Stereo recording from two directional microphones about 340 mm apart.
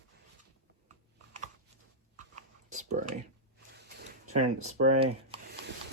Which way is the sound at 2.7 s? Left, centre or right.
Right.